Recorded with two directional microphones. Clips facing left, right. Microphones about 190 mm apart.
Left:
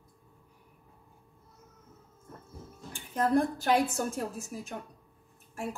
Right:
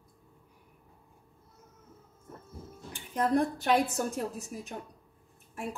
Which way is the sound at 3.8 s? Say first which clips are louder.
Even; 20° right (ahead or behind).